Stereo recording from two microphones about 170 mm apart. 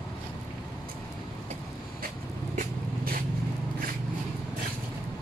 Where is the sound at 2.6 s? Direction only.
55° right (ahead or behind).